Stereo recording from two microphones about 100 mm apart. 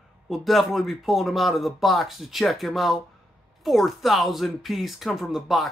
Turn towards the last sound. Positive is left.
turn(degrees=0)  # may be behind; listen again after turning